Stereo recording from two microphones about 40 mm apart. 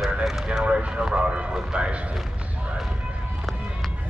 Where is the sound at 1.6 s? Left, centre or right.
Right.